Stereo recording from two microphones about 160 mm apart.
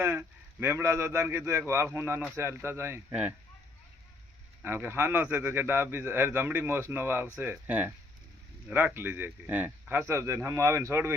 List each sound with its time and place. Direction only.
0.0 s speech: 10° right (ahead or behind)
4.6 s speech: 15° right (ahead or behind)